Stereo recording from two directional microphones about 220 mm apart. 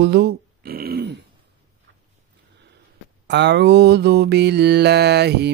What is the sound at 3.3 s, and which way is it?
Speech, 50° right (ahead or behind).